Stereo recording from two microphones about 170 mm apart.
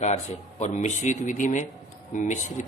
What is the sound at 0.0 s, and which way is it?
Speech, 40° left (ahead or behind).